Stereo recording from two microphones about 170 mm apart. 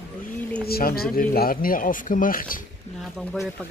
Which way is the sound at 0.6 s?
60° left (ahead or behind).